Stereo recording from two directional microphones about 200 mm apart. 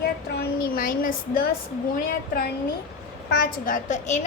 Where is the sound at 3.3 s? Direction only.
45° left (ahead or behind).